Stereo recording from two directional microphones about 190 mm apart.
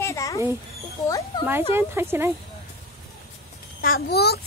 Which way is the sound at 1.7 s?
15° right (ahead or behind).